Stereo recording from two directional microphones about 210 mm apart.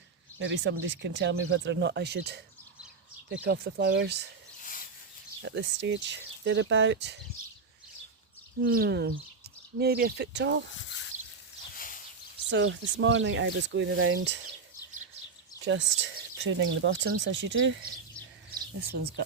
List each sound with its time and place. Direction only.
0.3 s speech: 60° right (ahead or behind)
3.4 s speech: 50° right (ahead or behind)
4.6 s a sound: 40° left (ahead or behind)
5.4 s speech: 60° right (ahead or behind)
8.7 s speech: 50° right (ahead or behind)
11.1 s a sound: 35° right (ahead or behind)
11.7 s a sound: 40° left (ahead or behind)
12.5 s speech: 60° right (ahead or behind)
15.6 s speech: 60° right (ahead or behind)